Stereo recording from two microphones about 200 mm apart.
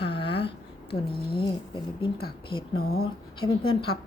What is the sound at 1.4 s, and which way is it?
Speech, 25° left (ahead or behind).